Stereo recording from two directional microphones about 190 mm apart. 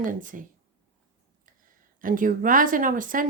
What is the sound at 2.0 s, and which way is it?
Speech, 45° right (ahead or behind).